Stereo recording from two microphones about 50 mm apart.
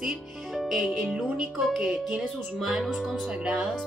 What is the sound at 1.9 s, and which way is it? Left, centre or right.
Speech, centre.